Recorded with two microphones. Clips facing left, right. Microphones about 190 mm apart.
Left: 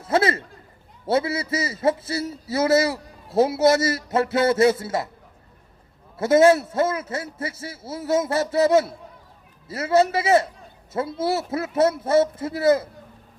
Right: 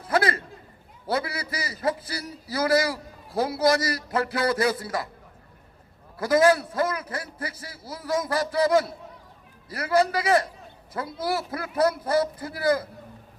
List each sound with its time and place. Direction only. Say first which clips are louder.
0.0 s a sound: left 3 dB; 25° left (ahead or behind)
1.0 s a man's voice: left 6 dB; 25° left (ahead or behind)
6.1 s a man's voice: left 4 dB; 25° left (ahead or behind)